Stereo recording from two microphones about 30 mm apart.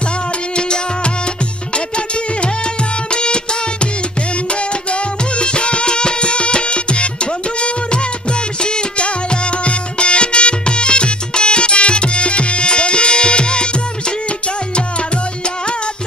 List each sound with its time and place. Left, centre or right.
0.5 s music: left
3.1 s music: left
5.4 s music: left
8.6 s music: left